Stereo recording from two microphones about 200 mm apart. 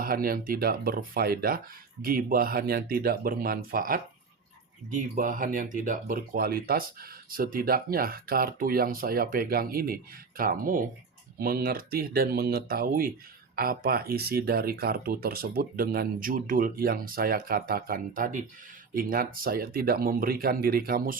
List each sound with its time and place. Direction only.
0.0 s speech: 45° right (ahead or behind)